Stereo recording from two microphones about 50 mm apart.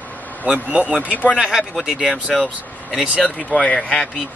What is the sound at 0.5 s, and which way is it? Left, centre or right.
Speech, right.